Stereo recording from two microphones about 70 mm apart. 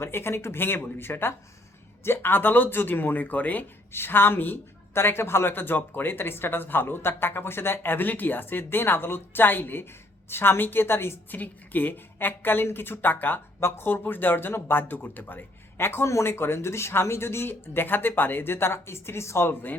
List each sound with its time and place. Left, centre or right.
0.0 s a woman's voice: left